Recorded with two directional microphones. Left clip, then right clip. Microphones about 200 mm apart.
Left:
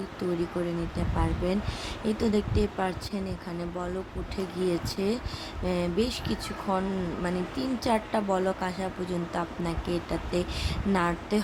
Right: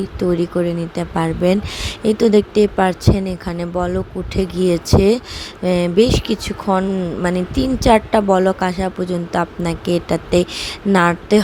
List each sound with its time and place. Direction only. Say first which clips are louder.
0.5 s speech: right 12 dB; 35° right (ahead or behind)